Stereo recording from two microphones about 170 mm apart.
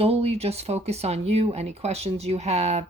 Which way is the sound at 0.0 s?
35° right (ahead or behind).